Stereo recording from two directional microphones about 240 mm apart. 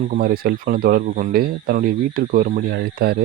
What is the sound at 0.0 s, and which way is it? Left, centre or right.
Speech, right.